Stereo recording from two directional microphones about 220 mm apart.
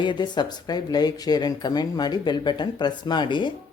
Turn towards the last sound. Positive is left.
turn(degrees=20)  # may be behind; listen again after turning